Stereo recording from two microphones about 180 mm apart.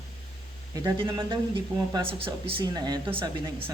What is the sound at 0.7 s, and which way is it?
Speech, 20° right (ahead or behind).